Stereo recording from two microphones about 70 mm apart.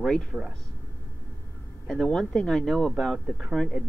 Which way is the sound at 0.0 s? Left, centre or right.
Centre.